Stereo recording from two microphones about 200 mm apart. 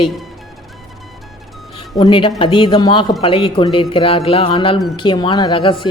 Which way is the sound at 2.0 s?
25° left (ahead or behind).